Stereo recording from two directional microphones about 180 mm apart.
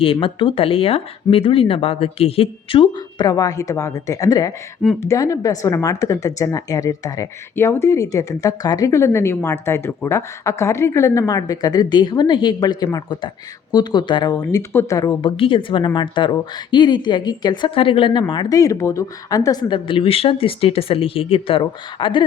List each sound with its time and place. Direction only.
0.0 s speech: 30° left (ahead or behind)